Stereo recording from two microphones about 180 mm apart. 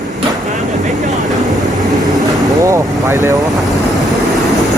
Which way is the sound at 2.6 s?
15° right (ahead or behind).